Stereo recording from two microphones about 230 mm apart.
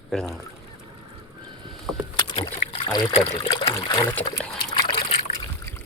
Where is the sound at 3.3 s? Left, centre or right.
Centre.